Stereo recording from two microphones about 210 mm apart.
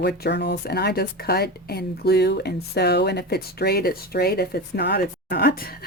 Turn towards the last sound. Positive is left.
turn(degrees=45)  # may be behind; listen again after turning